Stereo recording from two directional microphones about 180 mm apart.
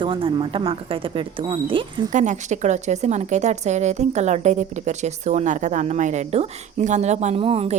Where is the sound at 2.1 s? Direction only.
45° right (ahead or behind).